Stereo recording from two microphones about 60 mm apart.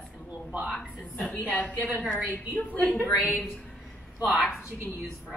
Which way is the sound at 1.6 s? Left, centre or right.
Left.